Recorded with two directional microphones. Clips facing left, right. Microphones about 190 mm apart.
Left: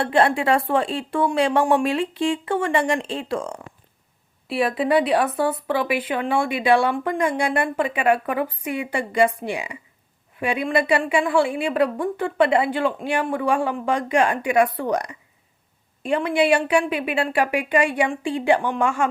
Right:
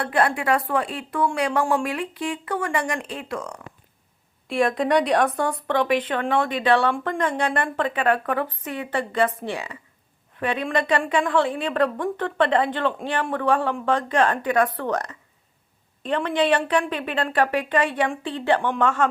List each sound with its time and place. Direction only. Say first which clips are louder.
0.0 s a woman's voice: left 3 dB; 25° left (ahead or behind)
4.4 s speech: even; 5° left (ahead or behind)